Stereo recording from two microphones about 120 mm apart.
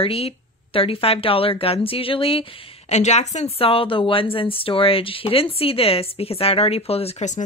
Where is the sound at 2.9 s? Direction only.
70° left (ahead or behind).